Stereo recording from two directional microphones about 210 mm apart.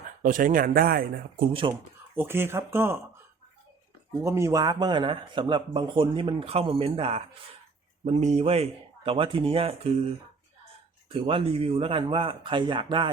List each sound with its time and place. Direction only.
0.2 s speech: 40° right (ahead or behind)
1.7 s speech: 20° right (ahead or behind)
2.1 s speech: 10° right (ahead or behind)
4.2 s speech: 15° right (ahead or behind)
11.1 s speech: 25° right (ahead or behind)